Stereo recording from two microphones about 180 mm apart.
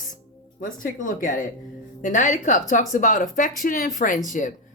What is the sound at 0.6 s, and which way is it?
Speech, 45° left (ahead or behind).